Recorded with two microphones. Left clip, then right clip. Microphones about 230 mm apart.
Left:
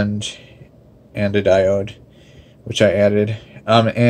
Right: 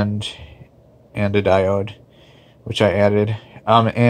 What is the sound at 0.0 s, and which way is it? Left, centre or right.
Speech, centre.